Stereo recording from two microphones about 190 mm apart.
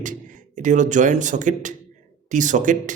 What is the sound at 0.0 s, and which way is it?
A man's voice, 40° right (ahead or behind).